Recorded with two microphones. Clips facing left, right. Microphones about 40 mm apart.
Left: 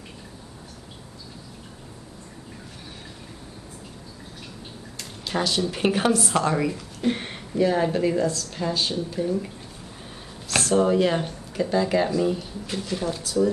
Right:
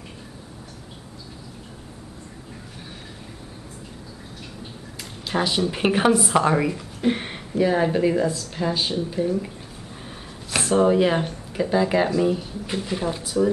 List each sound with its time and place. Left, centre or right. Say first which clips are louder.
4.9 s speech: right 2 dB; centre
10.5 s speech: right 2 dB; centre